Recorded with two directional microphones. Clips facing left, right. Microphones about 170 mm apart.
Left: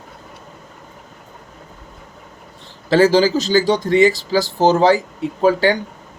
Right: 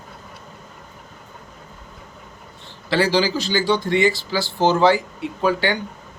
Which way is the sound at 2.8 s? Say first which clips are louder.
Left 6 dB; 45° left (ahead or behind).